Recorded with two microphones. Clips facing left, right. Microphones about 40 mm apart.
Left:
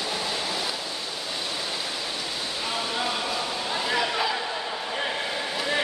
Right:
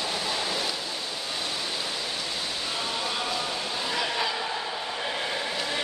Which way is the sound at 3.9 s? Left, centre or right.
Centre.